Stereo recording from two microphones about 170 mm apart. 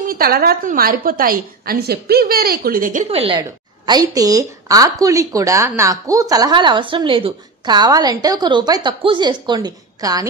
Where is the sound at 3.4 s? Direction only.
25° right (ahead or behind).